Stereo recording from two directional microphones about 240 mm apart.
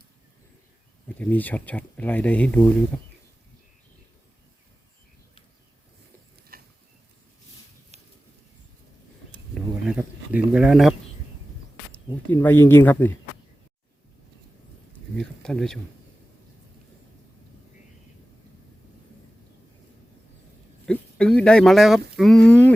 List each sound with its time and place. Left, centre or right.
1.0 s speech: centre
6.5 s a sound: right
9.8 s a sound: centre
11.9 s speech: centre
14.9 s speech: centre
20.8 s speech: centre